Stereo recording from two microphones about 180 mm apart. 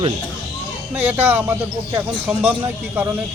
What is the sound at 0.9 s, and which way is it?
Speech, 10° right (ahead or behind).